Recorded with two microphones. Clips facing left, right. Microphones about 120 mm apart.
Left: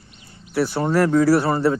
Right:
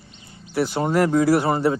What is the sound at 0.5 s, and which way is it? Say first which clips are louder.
Speech: left 1 dB; 15° right (ahead or behind).